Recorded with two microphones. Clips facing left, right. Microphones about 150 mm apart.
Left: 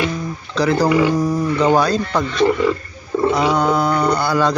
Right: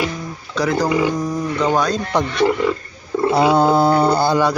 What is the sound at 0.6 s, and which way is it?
Speech, centre (ahead or behind).